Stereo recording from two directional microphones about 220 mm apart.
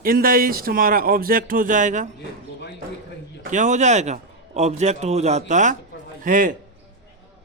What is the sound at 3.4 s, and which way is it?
A man's voice, 35° right (ahead or behind).